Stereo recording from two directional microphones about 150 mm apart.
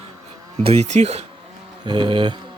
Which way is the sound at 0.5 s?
40° right (ahead or behind).